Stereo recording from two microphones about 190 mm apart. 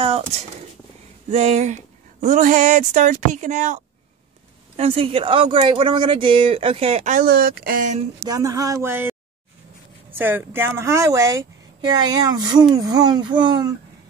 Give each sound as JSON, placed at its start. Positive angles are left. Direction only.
{"t": 0.0, "sound": "a sound", "side_deg": -30}
{"t": 1.3, "sound": "speech", "side_deg": -35}
{"t": 8.2, "sound": "speech", "side_deg": -15}
{"t": 10.1, "sound": "speech", "side_deg": -10}